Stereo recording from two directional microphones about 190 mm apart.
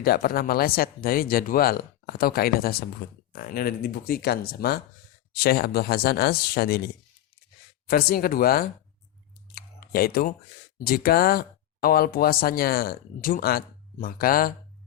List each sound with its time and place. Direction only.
0.0 s speech: 50° left (ahead or behind)
9.6 s a sound: 55° left (ahead or behind)
10.8 s speech: 55° left (ahead or behind)